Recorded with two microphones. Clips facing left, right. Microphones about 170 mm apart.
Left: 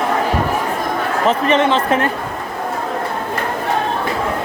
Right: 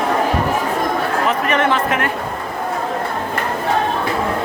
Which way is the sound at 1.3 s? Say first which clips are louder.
Left 5 dB; 25° left (ahead or behind).